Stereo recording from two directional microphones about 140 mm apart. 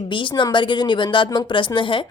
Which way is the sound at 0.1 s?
35° left (ahead or behind).